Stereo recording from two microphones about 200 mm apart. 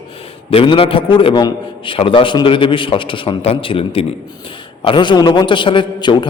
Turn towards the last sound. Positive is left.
turn(degrees=25)  # may be behind; listen again after turning